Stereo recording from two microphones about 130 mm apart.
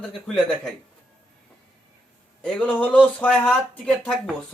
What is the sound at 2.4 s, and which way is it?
Speech, 10° left (ahead or behind).